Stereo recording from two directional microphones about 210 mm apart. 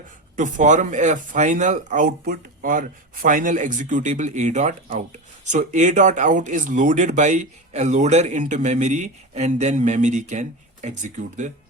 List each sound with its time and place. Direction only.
0.3 s speech: 35° right (ahead or behind)